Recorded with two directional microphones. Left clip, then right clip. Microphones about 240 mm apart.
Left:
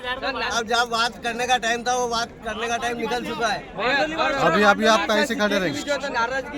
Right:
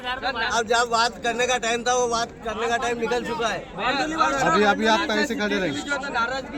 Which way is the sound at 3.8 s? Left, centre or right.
Left.